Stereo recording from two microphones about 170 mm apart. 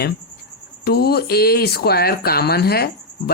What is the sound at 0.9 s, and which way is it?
Speech, 70° left (ahead or behind).